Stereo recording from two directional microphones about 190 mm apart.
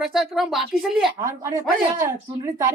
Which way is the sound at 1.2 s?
15° right (ahead or behind).